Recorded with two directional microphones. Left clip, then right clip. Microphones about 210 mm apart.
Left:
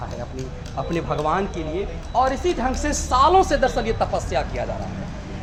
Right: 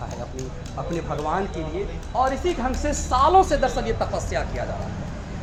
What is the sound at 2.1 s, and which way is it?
A woman's voice, 50° left (ahead or behind).